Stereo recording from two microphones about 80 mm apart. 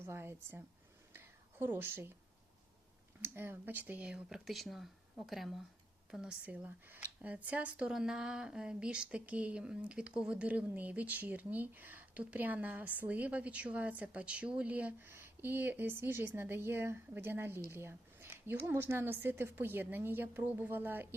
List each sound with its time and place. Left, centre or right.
0.0 s speech: right
1.1 s a sound: right
3.2 s speech: right
4.4 s speech: centre; by 21.2 s right